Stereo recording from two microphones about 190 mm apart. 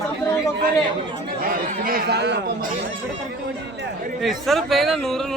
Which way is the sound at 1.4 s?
50° right (ahead or behind).